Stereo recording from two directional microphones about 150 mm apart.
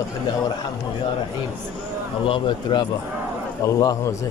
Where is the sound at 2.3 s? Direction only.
30° left (ahead or behind).